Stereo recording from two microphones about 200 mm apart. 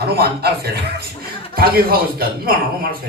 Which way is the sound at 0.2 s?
55° right (ahead or behind).